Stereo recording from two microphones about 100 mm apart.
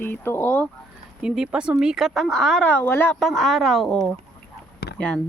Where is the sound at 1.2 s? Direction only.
5° right (ahead or behind).